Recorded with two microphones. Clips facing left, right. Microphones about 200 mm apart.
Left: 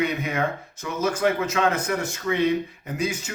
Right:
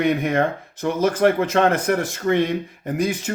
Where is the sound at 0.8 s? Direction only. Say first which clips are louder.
Right 5 dB; 55° right (ahead or behind).